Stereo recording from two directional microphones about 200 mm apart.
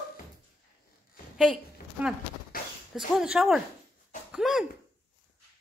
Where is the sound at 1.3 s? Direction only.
5° right (ahead or behind).